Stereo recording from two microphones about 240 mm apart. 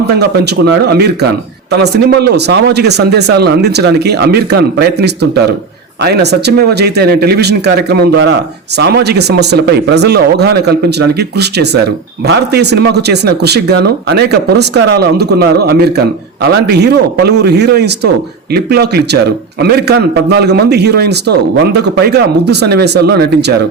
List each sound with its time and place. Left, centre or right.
0.1 s speech: right